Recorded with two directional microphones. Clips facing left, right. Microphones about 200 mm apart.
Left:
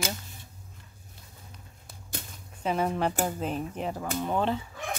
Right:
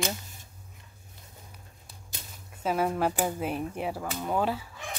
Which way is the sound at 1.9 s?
55° left (ahead or behind).